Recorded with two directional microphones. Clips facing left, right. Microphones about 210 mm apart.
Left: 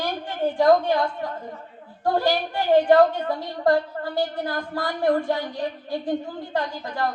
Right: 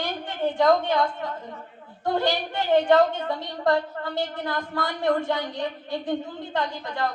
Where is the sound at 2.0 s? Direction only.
20° right (ahead or behind).